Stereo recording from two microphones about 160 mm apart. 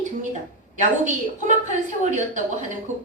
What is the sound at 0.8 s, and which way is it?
A woman's voice, 50° right (ahead or behind).